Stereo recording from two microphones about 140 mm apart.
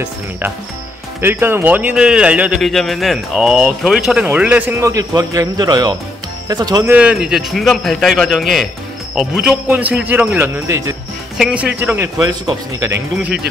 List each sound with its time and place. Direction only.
1.2 s a man's voice: 15° right (ahead or behind)
4.8 s speech: 25° right (ahead or behind)
6.8 s a man's voice: 10° right (ahead or behind)
11.3 s a man's voice: 5° right (ahead or behind); by 12.9 s 25° right (ahead or behind)
12.9 s a man's voice: 10° right (ahead or behind)